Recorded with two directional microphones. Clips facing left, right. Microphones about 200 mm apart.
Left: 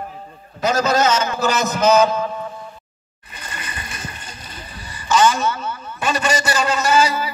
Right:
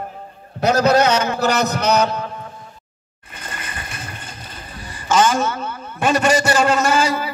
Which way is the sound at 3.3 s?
50° right (ahead or behind).